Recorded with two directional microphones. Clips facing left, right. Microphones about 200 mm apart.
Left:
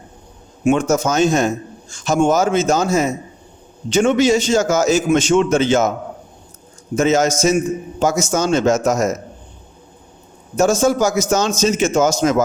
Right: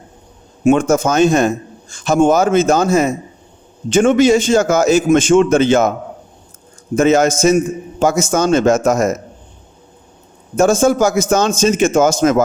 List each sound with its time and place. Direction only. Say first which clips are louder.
0.6 s a man's voice: right 3 dB; 50° right (ahead or behind)
6.9 s a man's voice: right 3 dB; 55° right (ahead or behind)
10.6 s a man's voice: right 3 dB; 55° right (ahead or behind)